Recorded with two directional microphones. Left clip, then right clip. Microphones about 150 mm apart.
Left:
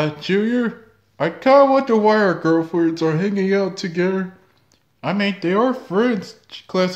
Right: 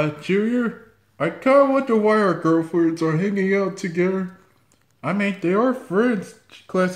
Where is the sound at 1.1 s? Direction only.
20° left (ahead or behind).